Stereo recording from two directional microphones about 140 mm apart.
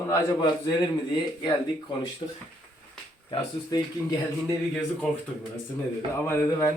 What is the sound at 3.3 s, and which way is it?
Speech, 30° left (ahead or behind).